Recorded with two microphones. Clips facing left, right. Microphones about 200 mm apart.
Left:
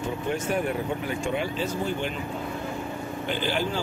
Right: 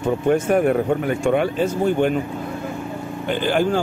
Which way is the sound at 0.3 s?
55° right (ahead or behind).